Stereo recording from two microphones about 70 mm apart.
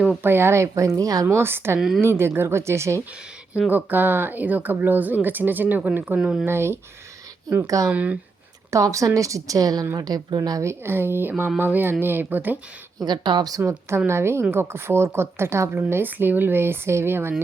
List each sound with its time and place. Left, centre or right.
0.2 s speech: right
1.3 s speech: right
3.7 s speech: right
6.1 s speech: centre
6.4 s speech: right
7.9 s speech: right
8.7 s a woman's voice: right
10.6 s speech: right
13.0 s speech: right
14.1 s speech: right